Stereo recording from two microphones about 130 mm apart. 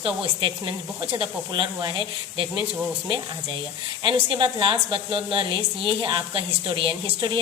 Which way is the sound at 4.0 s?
40° right (ahead or behind).